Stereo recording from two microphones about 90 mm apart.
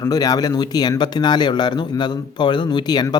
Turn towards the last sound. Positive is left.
turn(degrees=50)  # may be behind; listen again after turning